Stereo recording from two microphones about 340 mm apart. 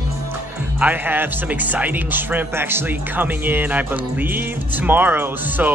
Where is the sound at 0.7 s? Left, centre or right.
Centre.